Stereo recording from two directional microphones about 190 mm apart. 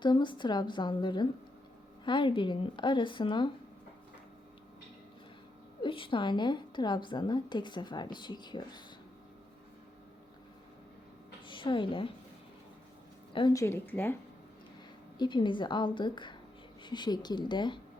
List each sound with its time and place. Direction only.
0.0 s a woman's voice: 25° left (ahead or behind)
5.8 s a woman's voice: 25° left (ahead or behind)
11.4 s a woman's voice: 25° left (ahead or behind)
13.3 s a woman's voice: 20° left (ahead or behind)
15.2 s a woman's voice: 25° left (ahead or behind)